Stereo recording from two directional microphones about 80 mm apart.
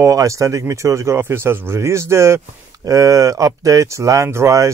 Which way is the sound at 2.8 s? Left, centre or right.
Right.